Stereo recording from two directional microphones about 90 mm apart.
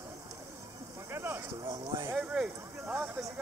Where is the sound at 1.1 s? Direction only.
25° right (ahead or behind).